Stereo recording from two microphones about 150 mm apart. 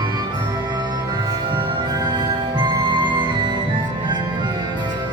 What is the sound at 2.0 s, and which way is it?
Music, 30° right (ahead or behind).